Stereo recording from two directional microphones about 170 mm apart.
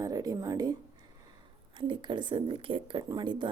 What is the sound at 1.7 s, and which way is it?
Speech, 30° right (ahead or behind).